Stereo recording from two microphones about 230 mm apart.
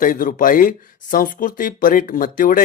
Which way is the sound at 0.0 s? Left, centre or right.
Left.